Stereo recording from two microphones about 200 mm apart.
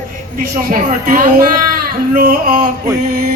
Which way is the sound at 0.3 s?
45° right (ahead or behind).